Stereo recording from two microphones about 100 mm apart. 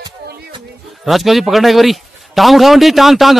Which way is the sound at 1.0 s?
Centre (ahead or behind).